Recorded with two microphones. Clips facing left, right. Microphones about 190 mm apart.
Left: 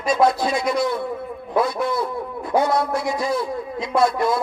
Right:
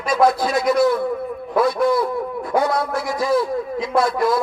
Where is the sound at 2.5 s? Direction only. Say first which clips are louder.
Left 1 dB; 25° left (ahead or behind).